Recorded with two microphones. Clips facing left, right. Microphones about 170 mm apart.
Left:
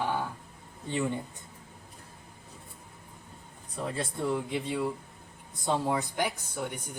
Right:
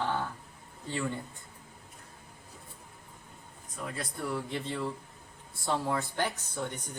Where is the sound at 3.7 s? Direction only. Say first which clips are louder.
Left 5 dB; 30° left (ahead or behind); by 6.9 s 10° left (ahead or behind).